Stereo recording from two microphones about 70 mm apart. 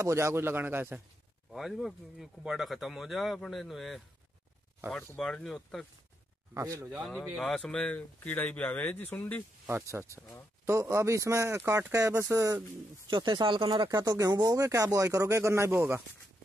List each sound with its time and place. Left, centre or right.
0.0 s speech: right
1.5 s speech: centre
5.1 s speech: centre
6.5 s speech: right
6.9 s speech: centre; by 9.4 s left
9.8 s speech: right
13.1 s speech: right